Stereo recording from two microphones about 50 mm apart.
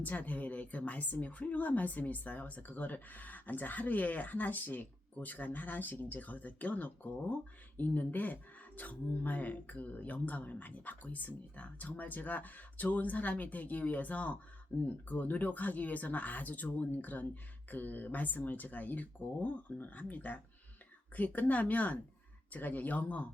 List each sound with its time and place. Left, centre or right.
0.0 s a woman's voice: left